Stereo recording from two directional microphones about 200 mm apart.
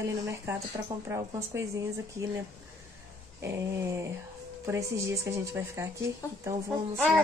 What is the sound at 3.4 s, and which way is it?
Speech, 15° right (ahead or behind).